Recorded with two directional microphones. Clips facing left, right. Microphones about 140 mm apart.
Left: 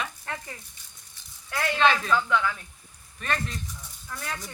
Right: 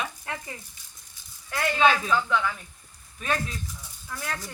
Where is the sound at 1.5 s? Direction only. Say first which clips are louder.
Right 1 dB; centre (ahead or behind).